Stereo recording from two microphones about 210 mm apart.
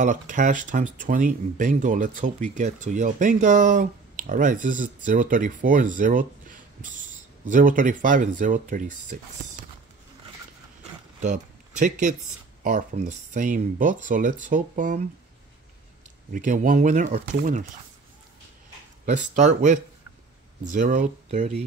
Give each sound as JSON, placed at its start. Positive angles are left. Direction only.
{"t": 0.0, "sound": "speech", "side_deg": -35}
{"t": 10.8, "sound": "a sound", "side_deg": -35}
{"t": 12.6, "sound": "speech", "side_deg": -35}
{"t": 16.3, "sound": "speech", "side_deg": -35}
{"t": 19.0, "sound": "speech", "side_deg": -35}